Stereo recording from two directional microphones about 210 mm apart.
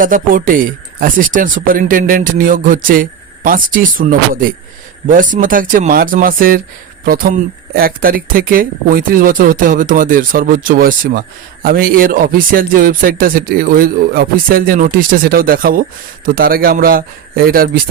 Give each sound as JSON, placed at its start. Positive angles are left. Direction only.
{"t": 0.0, "sound": "speech", "side_deg": -40}